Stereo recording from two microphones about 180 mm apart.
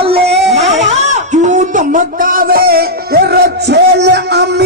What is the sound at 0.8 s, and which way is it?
Music, 40° right (ahead or behind).